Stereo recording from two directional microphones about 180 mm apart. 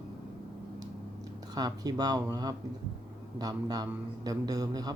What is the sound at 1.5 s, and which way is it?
A man's voice, 20° right (ahead or behind).